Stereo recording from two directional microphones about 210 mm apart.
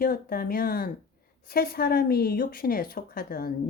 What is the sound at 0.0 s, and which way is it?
A woman's voice, 45° left (ahead or behind).